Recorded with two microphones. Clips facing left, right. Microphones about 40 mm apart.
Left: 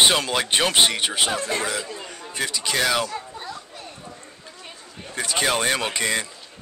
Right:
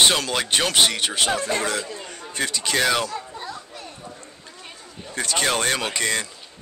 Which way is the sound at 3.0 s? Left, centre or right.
Centre.